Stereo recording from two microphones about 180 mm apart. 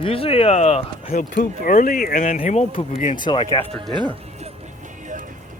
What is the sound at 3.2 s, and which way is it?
Speech, 25° left (ahead or behind).